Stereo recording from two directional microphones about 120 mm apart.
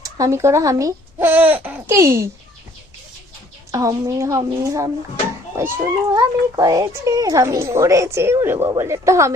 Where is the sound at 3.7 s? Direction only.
30° right (ahead or behind).